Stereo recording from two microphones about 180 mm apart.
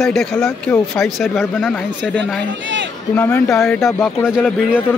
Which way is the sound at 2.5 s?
90° right.